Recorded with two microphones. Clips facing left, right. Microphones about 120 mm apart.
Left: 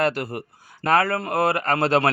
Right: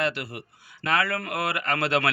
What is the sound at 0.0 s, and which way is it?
A man's voice, 45° left (ahead or behind).